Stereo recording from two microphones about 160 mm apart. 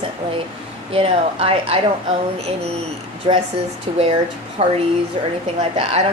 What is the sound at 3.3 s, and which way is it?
Speech, 30° right (ahead or behind).